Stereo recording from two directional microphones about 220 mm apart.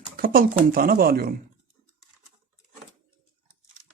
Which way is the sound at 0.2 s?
40° right (ahead or behind).